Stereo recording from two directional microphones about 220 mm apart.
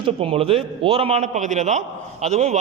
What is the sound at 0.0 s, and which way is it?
A man's voice, 25° right (ahead or behind).